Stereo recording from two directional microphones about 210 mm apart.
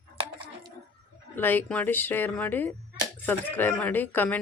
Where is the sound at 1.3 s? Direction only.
10° left (ahead or behind).